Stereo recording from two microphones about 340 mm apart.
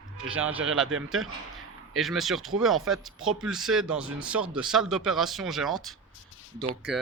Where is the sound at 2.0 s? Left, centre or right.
Centre.